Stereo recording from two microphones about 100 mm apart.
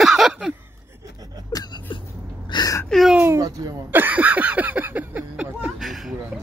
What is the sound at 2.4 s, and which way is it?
Speech, 45° left (ahead or behind).